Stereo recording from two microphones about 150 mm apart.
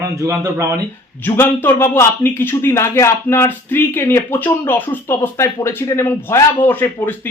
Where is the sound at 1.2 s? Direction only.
15° left (ahead or behind).